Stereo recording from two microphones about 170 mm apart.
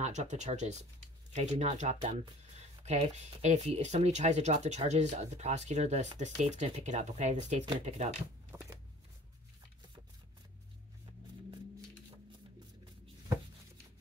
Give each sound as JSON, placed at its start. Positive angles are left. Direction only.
{"t": 0.0, "sound": "speech", "side_deg": -45}
{"t": 8.5, "sound": "shuffling cards", "side_deg": -20}